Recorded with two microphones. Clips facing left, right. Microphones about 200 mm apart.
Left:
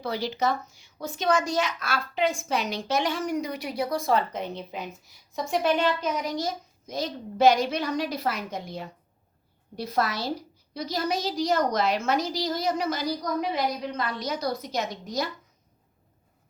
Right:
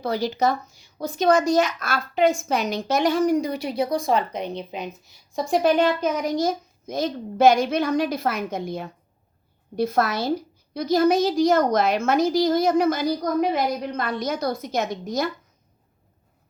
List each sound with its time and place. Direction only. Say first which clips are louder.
0.0 s a woman's voice: right 5 dB; 45° right (ahead or behind); by 5.1 s 20° right (ahead or behind)
5.3 s a woman's voice: right 5 dB; 35° right (ahead or behind); by 15.3 s 50° right (ahead or behind)